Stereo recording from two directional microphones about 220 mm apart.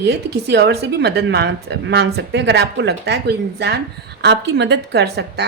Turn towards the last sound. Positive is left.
turn(degrees=-50)  # may be behind; listen again after turning